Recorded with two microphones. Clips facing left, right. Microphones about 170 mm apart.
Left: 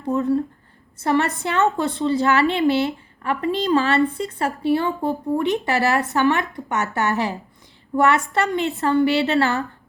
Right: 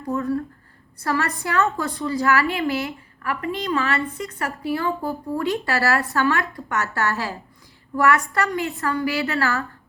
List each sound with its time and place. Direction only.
0.0 s a woman's voice: 25° left (ahead or behind)